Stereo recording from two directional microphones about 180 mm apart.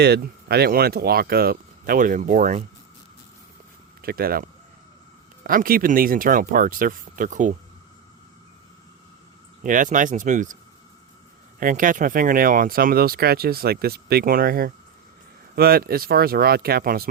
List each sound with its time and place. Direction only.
0.0 s speech: 65° right (ahead or behind); by 2.6 s 45° right (ahead or behind)
4.0 s speech: 55° right (ahead or behind)
9.6 s speech: 45° right (ahead or behind)
11.6 s speech: 50° right (ahead or behind)